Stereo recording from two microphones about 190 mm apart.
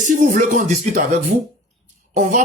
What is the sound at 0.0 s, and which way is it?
Speech, 40° right (ahead or behind).